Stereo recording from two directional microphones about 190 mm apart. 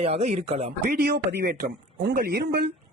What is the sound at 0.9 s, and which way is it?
Speech, 55° right (ahead or behind).